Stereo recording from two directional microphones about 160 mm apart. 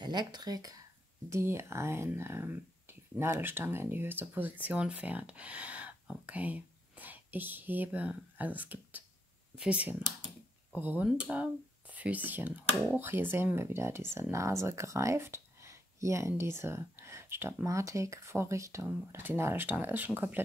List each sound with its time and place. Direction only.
0.0 s speech: 25° right (ahead or behind); by 20.4 s 10° right (ahead or behind)